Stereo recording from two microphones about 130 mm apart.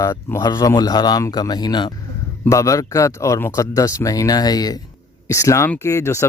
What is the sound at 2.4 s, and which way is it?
Speech, 25° left (ahead or behind).